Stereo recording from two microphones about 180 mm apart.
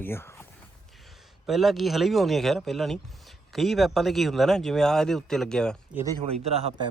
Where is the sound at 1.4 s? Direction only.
Centre (ahead or behind).